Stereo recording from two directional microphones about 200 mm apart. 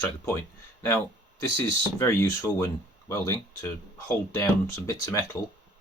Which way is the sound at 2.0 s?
15° left (ahead or behind).